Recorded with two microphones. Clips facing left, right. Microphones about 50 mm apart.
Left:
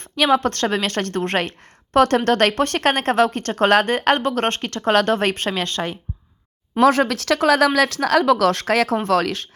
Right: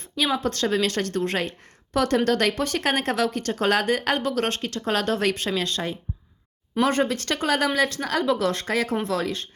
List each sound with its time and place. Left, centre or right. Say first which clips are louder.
0.2 s a woman's voice: left 6 dB; left
6.8 s speech: left 7 dB; left
9.0 s speech: left 7 dB; left